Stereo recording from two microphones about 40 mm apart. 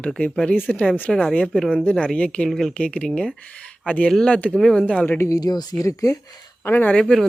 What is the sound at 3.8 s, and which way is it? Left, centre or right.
Speech, left.